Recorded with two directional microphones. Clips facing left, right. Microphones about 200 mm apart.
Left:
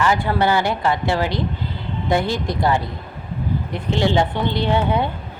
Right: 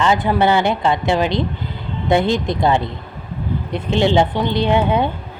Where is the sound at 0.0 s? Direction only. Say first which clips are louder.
Right 3 dB; 20° right (ahead or behind).